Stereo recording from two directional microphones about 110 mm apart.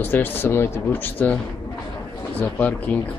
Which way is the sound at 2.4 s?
15° left (ahead or behind).